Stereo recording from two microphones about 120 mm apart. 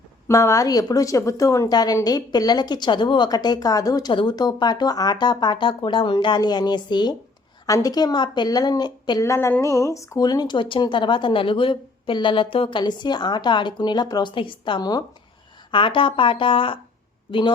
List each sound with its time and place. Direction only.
0.3 s speech: 25° left (ahead or behind)
9.2 s speech: 25° left (ahead or behind)
15.7 s speech: 45° left (ahead or behind)